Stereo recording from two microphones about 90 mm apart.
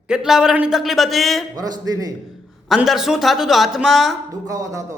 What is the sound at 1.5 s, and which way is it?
Speech, 45° right (ahead or behind).